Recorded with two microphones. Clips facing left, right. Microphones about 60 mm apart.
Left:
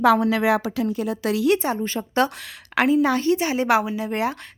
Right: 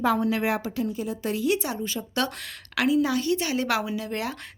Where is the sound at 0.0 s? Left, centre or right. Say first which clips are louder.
Left 6 dB; left.